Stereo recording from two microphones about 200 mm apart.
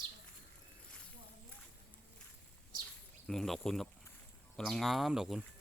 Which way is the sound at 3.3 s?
Centre (ahead or behind).